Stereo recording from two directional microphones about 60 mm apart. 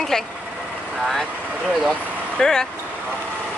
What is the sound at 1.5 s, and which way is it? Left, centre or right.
Speech, centre.